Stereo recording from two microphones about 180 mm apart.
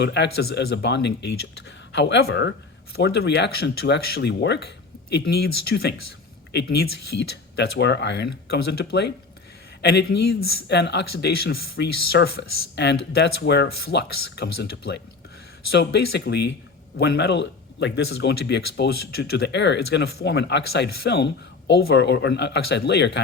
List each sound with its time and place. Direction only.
0.0 s speech: 70° left (ahead or behind)
12.7 s speech: 70° left (ahead or behind)